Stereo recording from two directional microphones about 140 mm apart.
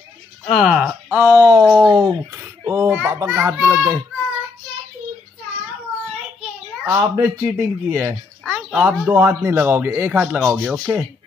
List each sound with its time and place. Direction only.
0.5 s speech: centre (ahead or behind); by 1.7 s 20° right (ahead or behind)
1.7 s speech: 10° right (ahead or behind)
2.0 s speech: 25° right (ahead or behind)
6.9 s speech: 20° right (ahead or behind)